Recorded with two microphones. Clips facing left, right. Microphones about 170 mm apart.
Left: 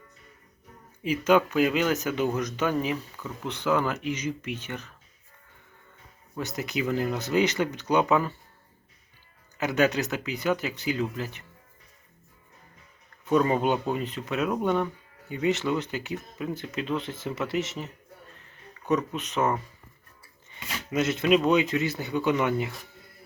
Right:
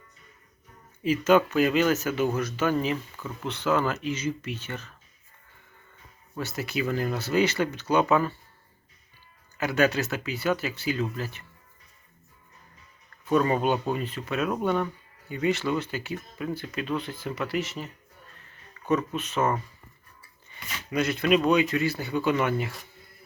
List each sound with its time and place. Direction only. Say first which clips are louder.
1.0 s speech: right 1 dB; 15° left (ahead or behind)
6.3 s speech: even; 20° left (ahead or behind)
9.6 s speech: even; 20° left (ahead or behind)
13.2 s speech: even; 20° left (ahead or behind)
20.6 s speech: left 1 dB; 20° left (ahead or behind)